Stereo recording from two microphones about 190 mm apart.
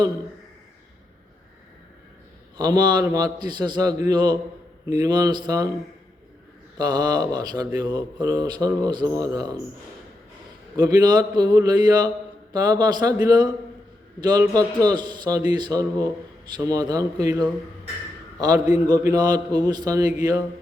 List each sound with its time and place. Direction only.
2.6 s speech: 20° right (ahead or behind)
6.7 s speech: 20° right (ahead or behind)
10.8 s a man's voice: 20° right (ahead or behind)